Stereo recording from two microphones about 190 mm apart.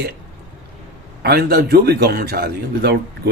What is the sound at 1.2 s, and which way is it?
A man's voice, 55° right (ahead or behind).